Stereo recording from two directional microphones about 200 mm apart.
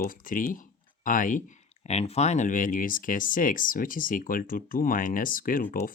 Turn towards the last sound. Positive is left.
turn(degrees=45)  # may be behind; listen again after turning